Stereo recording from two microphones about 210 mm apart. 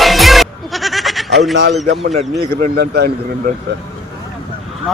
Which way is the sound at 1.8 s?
60° right (ahead or behind).